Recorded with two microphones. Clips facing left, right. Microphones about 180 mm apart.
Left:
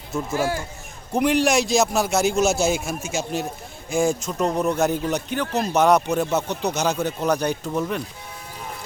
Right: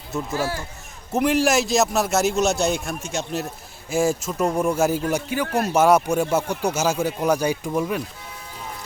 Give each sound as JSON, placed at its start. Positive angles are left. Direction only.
{"t": 0.1, "sound": "speech", "side_deg": 0}
{"t": 0.3, "sound": "speech", "side_deg": 15}
{"t": 1.1, "sound": "a man's voice", "side_deg": 0}